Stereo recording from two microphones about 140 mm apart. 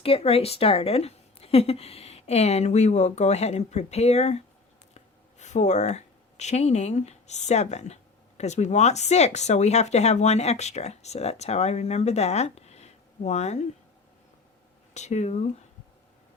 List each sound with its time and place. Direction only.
0.0 s speech: 45° left (ahead or behind)
14.9 s speech: 55° left (ahead or behind)